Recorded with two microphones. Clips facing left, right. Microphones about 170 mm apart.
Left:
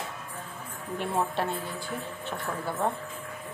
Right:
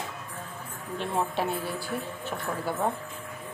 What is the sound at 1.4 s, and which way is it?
Speech, 5° right (ahead or behind).